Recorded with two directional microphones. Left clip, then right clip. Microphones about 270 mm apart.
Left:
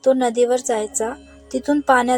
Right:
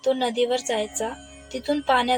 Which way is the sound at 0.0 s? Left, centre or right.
Centre.